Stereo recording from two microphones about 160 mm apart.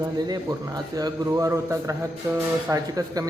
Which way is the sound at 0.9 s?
25° right (ahead or behind).